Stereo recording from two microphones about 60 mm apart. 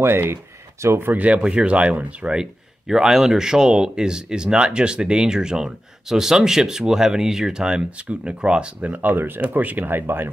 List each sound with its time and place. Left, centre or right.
0.0 s speech: right
0.8 s speech: right
1.1 s speech: right
2.9 s speech: centre; by 10.3 s right